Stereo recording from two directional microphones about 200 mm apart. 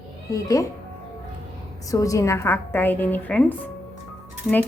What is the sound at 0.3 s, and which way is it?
Speech, 15° left (ahead or behind).